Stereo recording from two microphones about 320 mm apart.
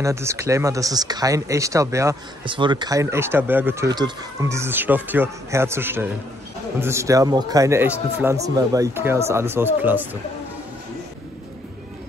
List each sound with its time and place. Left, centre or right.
0.0 s speech: centre